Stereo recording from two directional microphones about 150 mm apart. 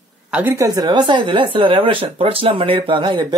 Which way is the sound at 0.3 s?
10° right (ahead or behind).